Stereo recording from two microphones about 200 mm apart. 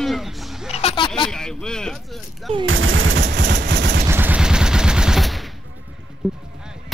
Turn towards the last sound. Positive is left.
turn(degrees=-5)  # may be behind; listen again after turning